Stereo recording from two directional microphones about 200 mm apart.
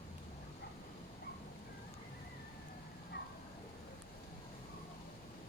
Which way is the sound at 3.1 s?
55° left (ahead or behind).